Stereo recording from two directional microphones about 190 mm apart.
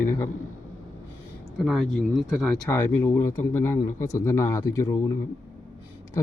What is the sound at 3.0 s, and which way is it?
Speech, 15° left (ahead or behind).